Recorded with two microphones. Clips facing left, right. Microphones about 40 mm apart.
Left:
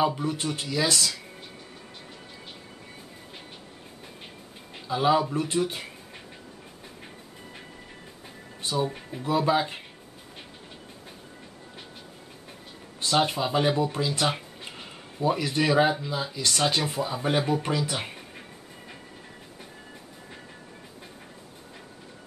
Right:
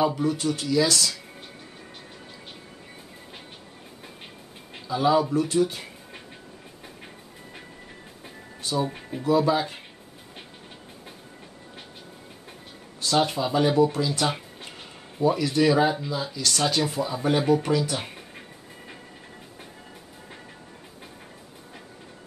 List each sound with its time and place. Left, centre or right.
0.0 s speech: left
4.8 s speech: left
8.5 s music: left
8.8 s speech: centre
9.2 s speech: left
13.1 s speech: left
13.9 s music: left
15.2 s speech: left